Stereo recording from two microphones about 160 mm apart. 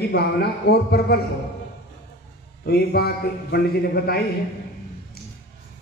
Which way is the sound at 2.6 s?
80° left.